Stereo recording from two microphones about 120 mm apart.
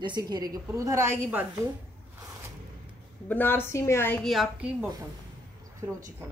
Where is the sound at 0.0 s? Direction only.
35° right (ahead or behind).